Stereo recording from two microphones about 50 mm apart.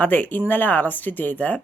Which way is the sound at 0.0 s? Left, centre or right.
Left.